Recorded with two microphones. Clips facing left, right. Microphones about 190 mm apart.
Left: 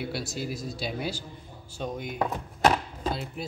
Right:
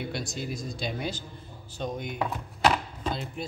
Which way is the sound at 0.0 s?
5° left (ahead or behind).